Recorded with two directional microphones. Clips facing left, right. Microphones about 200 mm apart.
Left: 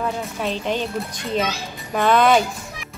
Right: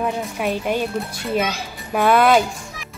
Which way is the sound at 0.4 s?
10° right (ahead or behind).